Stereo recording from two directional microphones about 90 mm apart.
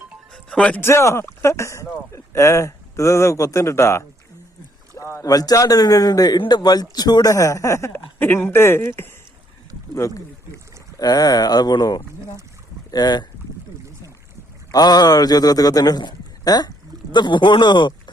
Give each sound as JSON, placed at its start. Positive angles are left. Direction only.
{"t": 0.5, "sound": "a man's voice", "side_deg": 15}
{"t": 0.8, "sound": "speech", "side_deg": 30}
{"t": 4.9, "sound": "boat", "side_deg": 25}
{"t": 5.2, "sound": "speech", "side_deg": 45}
{"t": 10.9, "sound": "speech", "side_deg": 45}
{"t": 14.7, "sound": "a man's voice", "side_deg": 45}